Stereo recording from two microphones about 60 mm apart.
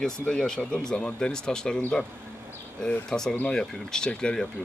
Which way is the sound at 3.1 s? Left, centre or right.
Centre.